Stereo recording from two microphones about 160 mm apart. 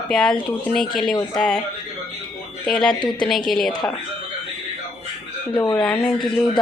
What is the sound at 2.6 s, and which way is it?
Speech, centre (ahead or behind).